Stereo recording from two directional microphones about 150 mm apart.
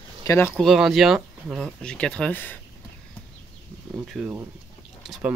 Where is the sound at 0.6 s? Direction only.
Centre (ahead or behind).